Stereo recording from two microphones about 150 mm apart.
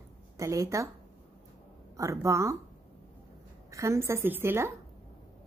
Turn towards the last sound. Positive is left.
turn(degrees=-15)  # may be behind; listen again after turning